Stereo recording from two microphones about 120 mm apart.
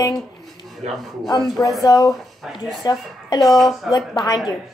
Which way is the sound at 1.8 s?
30° left (ahead or behind).